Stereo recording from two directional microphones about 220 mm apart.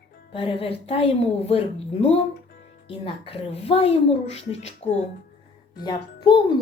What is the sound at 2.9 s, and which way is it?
A woman's voice, 25° left (ahead or behind).